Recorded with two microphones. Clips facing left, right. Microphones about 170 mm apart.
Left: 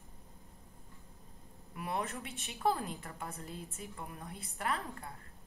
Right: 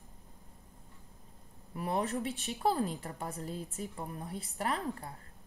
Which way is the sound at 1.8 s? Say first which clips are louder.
Right 5 dB; 35° right (ahead or behind).